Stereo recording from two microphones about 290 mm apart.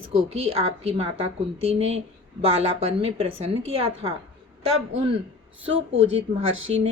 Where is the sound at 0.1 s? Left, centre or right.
Centre.